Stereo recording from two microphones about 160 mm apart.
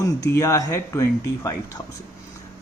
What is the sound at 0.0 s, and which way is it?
Speech, 20° left (ahead or behind).